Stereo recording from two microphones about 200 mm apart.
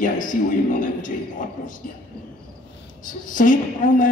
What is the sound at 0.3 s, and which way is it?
Speech, 40° left (ahead or behind).